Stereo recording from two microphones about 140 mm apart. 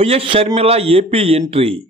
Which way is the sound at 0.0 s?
40° right (ahead or behind).